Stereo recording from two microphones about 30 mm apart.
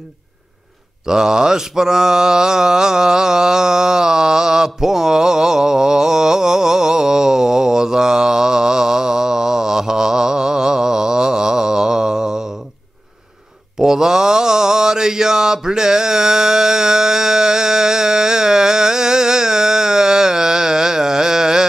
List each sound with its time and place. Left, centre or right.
1.0 s mantra: right
13.7 s mantra: right